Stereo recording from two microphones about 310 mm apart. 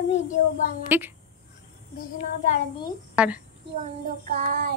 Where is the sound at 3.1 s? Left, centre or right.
Centre.